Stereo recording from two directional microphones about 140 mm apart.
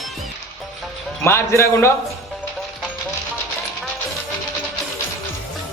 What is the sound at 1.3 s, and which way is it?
Speech, 20° left (ahead or behind).